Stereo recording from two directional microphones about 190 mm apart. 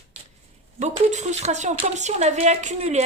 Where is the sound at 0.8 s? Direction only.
35° right (ahead or behind).